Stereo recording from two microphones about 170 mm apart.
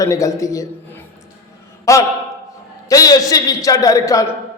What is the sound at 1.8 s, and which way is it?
A man's voice, 20° left (ahead or behind).